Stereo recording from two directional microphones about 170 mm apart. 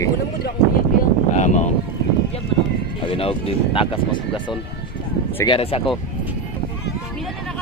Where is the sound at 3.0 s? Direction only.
30° left (ahead or behind).